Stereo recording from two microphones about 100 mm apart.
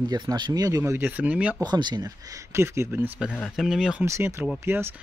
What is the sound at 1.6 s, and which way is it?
Speech, 45° right (ahead or behind).